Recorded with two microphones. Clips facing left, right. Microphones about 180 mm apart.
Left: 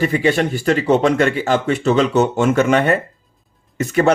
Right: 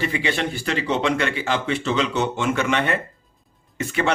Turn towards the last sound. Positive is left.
turn(degrees=40)  # may be behind; listen again after turning